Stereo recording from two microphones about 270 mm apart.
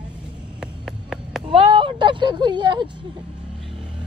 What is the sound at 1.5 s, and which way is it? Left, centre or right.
Speech, centre.